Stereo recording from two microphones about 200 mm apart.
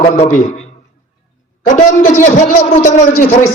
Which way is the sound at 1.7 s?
40° left (ahead or behind).